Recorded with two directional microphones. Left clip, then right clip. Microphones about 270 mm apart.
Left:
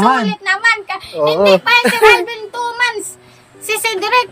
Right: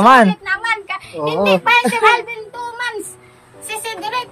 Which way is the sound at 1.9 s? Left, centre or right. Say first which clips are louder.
Left 4 dB; left.